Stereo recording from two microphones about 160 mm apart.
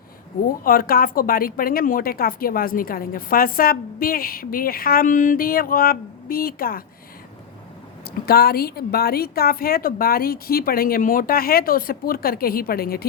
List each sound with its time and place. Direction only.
0.4 s speech: 65° left (ahead or behind)
8.0 s a woman's voice: 75° left (ahead or behind)